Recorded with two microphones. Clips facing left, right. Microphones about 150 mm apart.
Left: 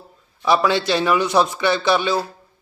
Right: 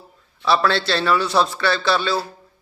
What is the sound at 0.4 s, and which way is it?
A man's voice, 15° left (ahead or behind).